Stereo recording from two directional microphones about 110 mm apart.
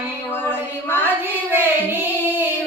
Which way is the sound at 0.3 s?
20° left (ahead or behind).